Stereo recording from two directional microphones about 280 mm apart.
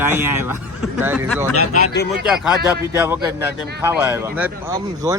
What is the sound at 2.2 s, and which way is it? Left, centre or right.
Speech, centre.